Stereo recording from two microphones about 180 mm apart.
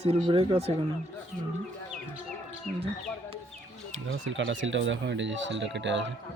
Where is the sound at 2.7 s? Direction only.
40° right (ahead or behind).